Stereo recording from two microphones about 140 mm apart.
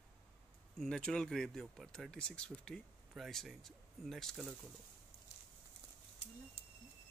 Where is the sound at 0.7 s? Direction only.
5° left (ahead or behind).